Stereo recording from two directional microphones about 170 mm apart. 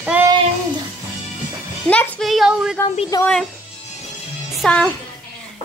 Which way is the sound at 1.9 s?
5° left (ahead or behind).